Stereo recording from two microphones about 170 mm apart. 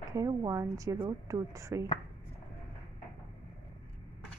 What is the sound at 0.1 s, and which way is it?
A woman's voice, 20° right (ahead or behind).